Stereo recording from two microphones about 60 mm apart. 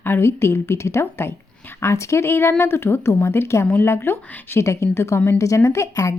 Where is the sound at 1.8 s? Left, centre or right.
Left.